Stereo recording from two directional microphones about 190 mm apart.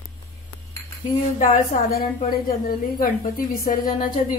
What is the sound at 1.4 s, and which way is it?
Speech, 45° left (ahead or behind).